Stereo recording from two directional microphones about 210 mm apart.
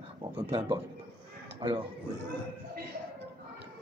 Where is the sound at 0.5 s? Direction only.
20° right (ahead or behind).